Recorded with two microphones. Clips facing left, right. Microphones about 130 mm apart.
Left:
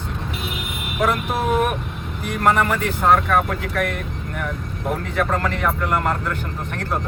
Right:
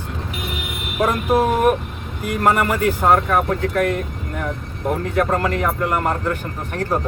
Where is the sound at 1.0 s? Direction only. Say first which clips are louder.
Right 4 dB; 40° right (ahead or behind).